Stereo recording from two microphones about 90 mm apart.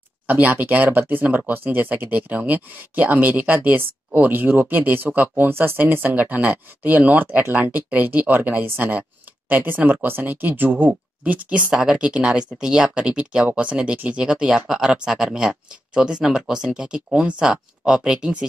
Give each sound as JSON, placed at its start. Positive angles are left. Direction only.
{"t": 0.3, "sound": "speech", "side_deg": -20}